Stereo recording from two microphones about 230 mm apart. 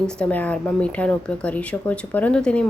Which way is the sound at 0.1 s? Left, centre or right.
Centre.